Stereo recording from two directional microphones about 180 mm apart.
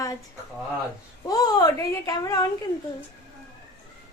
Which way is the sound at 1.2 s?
20° left (ahead or behind).